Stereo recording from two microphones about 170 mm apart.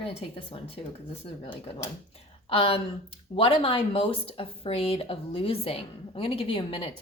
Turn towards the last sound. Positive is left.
turn(degrees=35)  # may be behind; listen again after turning